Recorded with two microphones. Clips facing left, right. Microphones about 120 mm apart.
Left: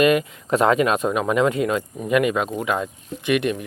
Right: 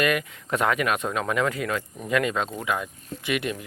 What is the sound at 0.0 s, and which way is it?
Speech, 25° left (ahead or behind).